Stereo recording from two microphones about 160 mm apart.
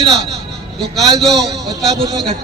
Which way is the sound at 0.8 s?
Centre (ahead or behind).